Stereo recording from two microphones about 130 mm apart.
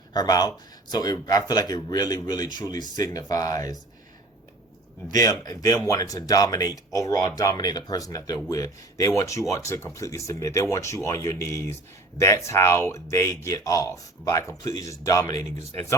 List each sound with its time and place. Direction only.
0.1 s speech: 30° left (ahead or behind)
5.0 s speech: 30° left (ahead or behind)